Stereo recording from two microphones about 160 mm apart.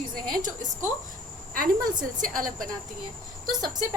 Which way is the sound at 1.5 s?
60° right (ahead or behind).